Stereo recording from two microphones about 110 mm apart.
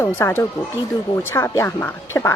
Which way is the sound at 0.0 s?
20° left (ahead or behind).